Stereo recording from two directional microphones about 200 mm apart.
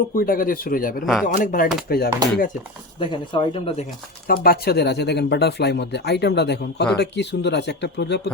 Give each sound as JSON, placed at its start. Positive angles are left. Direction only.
{"t": 0.1, "sound": "speech", "side_deg": 45}
{"t": 3.0, "sound": "speech", "side_deg": 25}
{"t": 4.3, "sound": "speech", "side_deg": 50}